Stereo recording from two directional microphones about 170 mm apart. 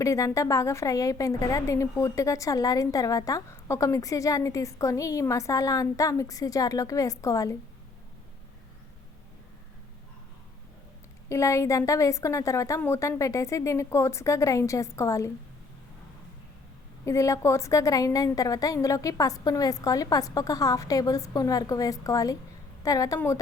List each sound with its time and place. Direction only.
0.0 s a woman's voice: 20° left (ahead or behind)
11.3 s a woman's voice: 15° left (ahead or behind)
17.1 s a woman's voice: 20° left (ahead or behind)